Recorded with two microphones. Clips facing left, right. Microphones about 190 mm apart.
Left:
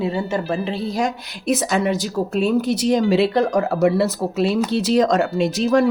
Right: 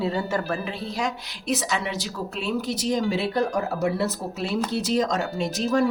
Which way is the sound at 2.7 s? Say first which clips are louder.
Left 7 dB; 70° left (ahead or behind).